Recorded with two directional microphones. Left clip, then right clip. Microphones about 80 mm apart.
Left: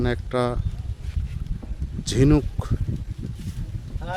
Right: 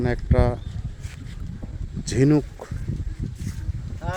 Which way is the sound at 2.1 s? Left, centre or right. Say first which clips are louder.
Even; centre.